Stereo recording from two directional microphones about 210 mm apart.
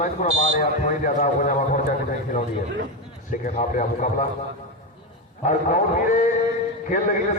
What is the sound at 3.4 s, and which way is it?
Speech, 35° left (ahead or behind).